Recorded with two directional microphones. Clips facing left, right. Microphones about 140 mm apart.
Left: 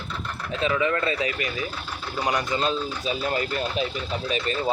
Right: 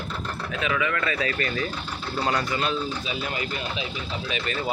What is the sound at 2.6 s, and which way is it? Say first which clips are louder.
Speech: left 1 dB; 35° left (ahead or behind).